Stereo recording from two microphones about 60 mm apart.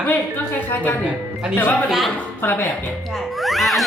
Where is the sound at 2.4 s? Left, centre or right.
Left.